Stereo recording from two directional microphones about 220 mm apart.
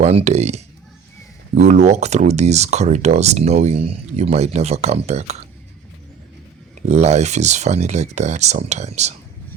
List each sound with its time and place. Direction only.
0.0 s speech: 30° right (ahead or behind)
6.8 s speech: 30° right (ahead or behind)